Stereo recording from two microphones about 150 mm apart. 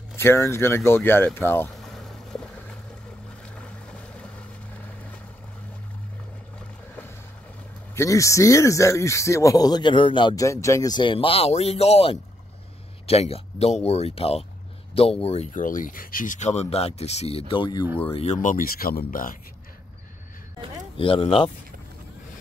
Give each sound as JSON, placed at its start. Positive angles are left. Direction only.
{"t": 0.1, "sound": "speech", "side_deg": 15}
{"t": 1.7, "sound": "boat", "side_deg": 0}
{"t": 3.5, "sound": "boat", "side_deg": 10}
{"t": 7.9, "sound": "speech", "side_deg": 20}
{"t": 15.5, "sound": "speech", "side_deg": 60}
{"t": 18.1, "sound": "speech", "side_deg": 50}
{"t": 21.0, "sound": "speech", "side_deg": 40}